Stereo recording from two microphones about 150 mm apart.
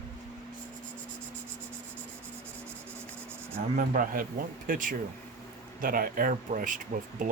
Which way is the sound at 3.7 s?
70° right (ahead or behind).